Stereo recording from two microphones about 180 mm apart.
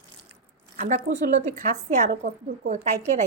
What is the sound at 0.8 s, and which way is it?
A woman's voice, 50° right (ahead or behind).